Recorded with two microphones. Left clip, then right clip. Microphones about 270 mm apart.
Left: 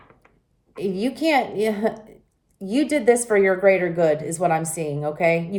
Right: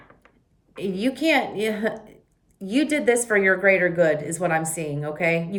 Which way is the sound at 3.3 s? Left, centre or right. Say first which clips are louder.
Right 1 dB; centre.